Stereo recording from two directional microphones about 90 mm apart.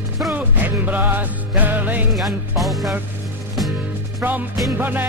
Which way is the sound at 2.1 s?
Centre (ahead or behind).